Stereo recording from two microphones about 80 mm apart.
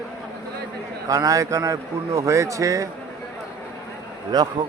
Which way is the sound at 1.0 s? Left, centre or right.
Right.